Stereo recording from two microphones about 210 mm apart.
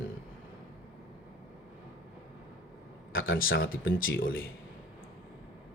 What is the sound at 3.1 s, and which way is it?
Speech, 70° left (ahead or behind).